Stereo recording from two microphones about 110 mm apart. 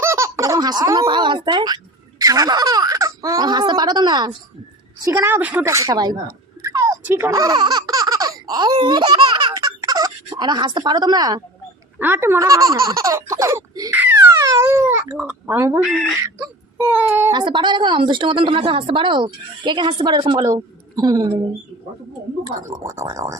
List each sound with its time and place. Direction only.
0.0 s a woman's voice: 25° right (ahead or behind)
5.2 s speech: 15° right (ahead or behind)
5.6 s speech: 30° right (ahead or behind)
6.6 s a sound: 30° right (ahead or behind)
7.0 s baby laughter: 20° right (ahead or behind)
8.7 s baby laughter: 45° right (ahead or behind)
11.9 s speech: 20° right (ahead or behind)
13.9 s baby cry: 15° right (ahead or behind)
16.2 s speech: 25° right (ahead or behind)
17.3 s a woman's voice: 45° right (ahead or behind)
20.5 s a woman's voice: 35° right (ahead or behind)
22.4 s speech: 30° right (ahead or behind)